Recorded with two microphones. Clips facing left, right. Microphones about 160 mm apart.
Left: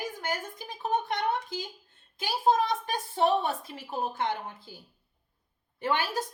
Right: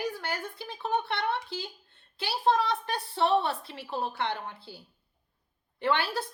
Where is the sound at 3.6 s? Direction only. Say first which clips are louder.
Even; 45° left (ahead or behind).